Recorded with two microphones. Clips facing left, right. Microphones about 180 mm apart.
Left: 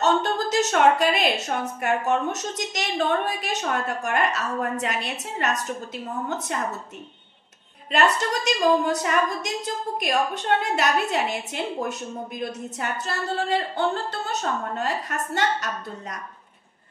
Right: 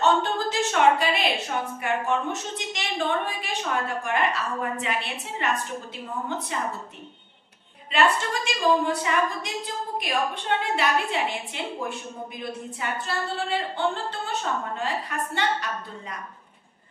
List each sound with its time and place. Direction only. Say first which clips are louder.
0.0 s a woman's voice: left 1 dB; 40° left (ahead or behind)
7.9 s a woman's voice: left 1 dB; 40° left (ahead or behind)